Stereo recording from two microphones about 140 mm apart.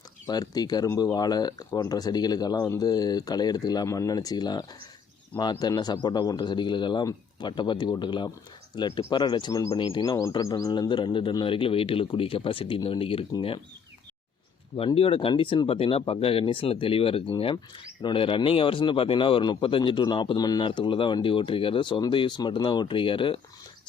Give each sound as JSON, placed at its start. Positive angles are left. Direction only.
{"t": 0.3, "sound": "speech", "side_deg": 30}
{"t": 14.8, "sound": "speech", "side_deg": 40}